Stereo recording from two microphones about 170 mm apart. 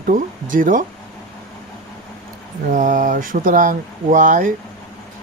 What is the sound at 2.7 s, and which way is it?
Speech, 50° right (ahead or behind).